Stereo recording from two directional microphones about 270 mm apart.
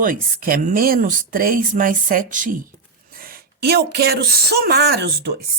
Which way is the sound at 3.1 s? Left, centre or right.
Right.